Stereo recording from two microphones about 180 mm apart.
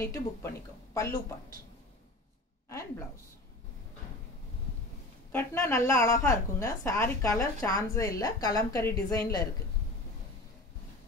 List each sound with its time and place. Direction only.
0.0 s a woman's voice: 15° left (ahead or behind)
5.3 s a woman's voice: 10° left (ahead or behind)